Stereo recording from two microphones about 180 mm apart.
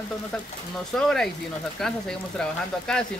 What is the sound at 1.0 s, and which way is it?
Speech, 5° left (ahead or behind).